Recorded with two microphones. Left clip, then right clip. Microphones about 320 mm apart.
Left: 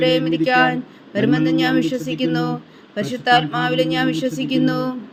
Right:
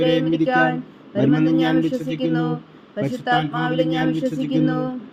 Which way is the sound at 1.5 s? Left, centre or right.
Left.